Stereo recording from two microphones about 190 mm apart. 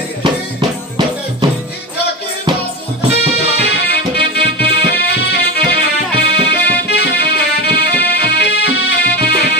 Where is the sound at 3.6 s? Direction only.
60° left (ahead or behind).